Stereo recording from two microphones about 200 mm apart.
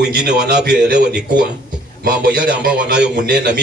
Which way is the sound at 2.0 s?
50° right (ahead or behind).